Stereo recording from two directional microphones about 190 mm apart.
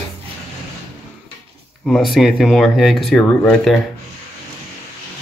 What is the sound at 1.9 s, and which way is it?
Speech, centre (ahead or behind).